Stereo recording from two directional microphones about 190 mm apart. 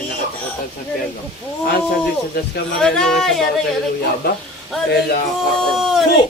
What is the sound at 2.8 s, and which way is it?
Speech, 5° left (ahead or behind).